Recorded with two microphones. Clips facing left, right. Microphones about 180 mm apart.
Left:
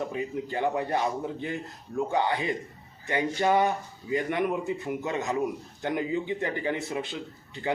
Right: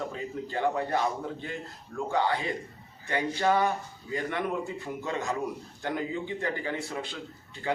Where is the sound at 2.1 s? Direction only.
20° left (ahead or behind).